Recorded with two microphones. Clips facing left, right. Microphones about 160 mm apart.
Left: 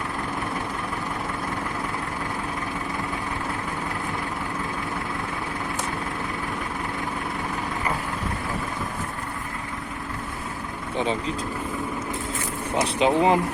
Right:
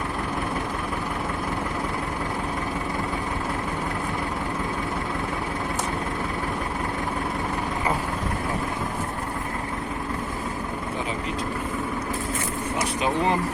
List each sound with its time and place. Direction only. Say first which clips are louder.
12.7 s vehicle: left 5 dB; 25° left (ahead or behind)